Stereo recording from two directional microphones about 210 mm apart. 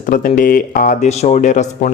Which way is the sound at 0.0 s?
40° left (ahead or behind).